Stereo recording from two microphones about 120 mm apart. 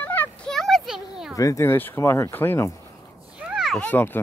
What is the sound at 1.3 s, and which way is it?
Speech, 25° left (ahead or behind).